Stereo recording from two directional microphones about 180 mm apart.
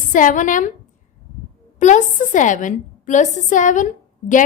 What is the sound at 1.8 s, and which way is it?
A woman's voice, 45° left (ahead or behind).